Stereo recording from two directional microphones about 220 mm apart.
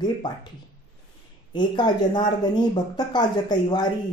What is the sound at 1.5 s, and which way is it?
A woman's voice, 20° left (ahead or behind).